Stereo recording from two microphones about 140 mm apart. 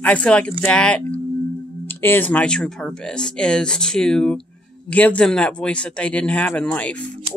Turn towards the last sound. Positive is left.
turn(degrees=10)  # may be behind; listen again after turning